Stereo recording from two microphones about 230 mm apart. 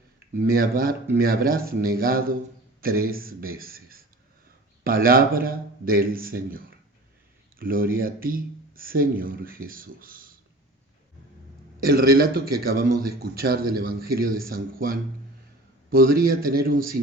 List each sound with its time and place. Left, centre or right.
0.4 s a man's voice: right
7.6 s a man's voice: right
11.8 s a man's voice: right